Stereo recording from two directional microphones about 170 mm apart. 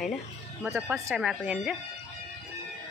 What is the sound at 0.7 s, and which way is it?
A woman's voice, centre (ahead or behind).